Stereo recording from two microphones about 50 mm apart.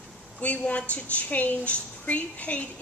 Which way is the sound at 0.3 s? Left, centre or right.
Left.